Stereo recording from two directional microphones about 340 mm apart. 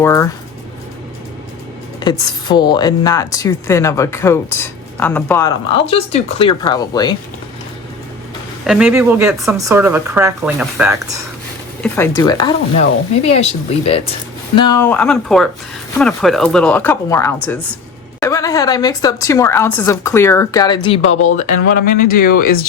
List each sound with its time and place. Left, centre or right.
0.0 s a woman's voice: centre
2.0 s a woman's voice: centre
8.6 s speech: centre
11.8 s a woman's voice: centre; by 22.6 s left